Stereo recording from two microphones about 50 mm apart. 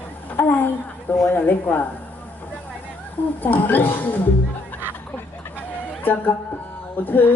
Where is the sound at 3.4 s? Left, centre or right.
Left.